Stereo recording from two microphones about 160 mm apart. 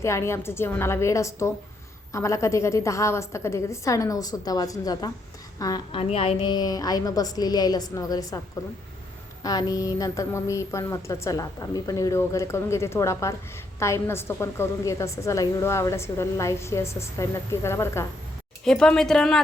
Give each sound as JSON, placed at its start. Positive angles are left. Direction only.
{"t": 0.0, "sound": "a woman's voice", "side_deg": 15}
{"t": 9.4, "sound": "a woman's voice", "side_deg": 25}
{"t": 18.6, "sound": "speech", "side_deg": 5}